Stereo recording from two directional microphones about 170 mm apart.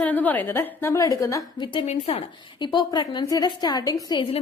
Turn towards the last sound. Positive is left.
turn(degrees=20)  # may be behind; listen again after turning